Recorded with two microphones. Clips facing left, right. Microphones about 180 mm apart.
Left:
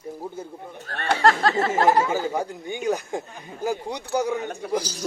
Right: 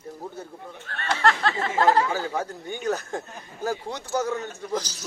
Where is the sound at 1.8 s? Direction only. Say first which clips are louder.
Even; 15° left (ahead or behind).